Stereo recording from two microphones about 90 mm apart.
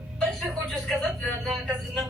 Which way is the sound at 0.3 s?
5° left (ahead or behind).